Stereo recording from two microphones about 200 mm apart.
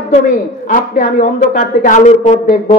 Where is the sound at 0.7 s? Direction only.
40° left (ahead or behind).